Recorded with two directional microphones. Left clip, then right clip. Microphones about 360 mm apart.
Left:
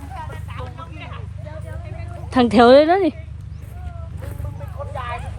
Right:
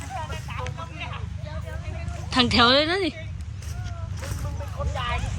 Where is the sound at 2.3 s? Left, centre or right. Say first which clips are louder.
Left 7 dB; centre.